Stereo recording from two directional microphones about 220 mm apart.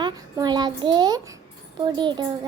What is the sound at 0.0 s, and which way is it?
A child's voice, 20° right (ahead or behind).